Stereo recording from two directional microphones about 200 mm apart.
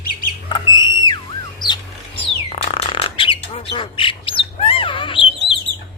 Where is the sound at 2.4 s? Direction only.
30° left (ahead or behind).